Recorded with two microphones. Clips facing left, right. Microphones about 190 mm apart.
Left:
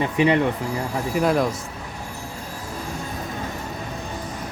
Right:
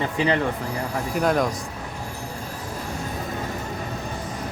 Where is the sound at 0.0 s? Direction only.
20° left (ahead or behind).